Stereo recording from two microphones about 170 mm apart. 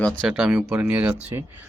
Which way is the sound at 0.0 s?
Centre (ahead or behind).